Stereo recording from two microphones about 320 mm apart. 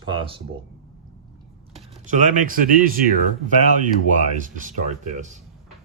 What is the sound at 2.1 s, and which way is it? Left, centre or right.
Speech, right.